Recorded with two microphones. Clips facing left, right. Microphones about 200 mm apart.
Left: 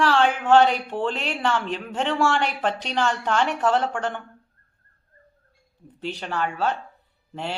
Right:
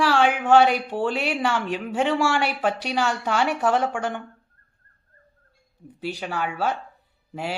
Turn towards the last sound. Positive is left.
turn(degrees=-10)  # may be behind; listen again after turning